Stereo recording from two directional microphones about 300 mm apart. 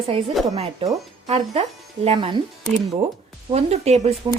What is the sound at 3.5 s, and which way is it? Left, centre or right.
Speech, right.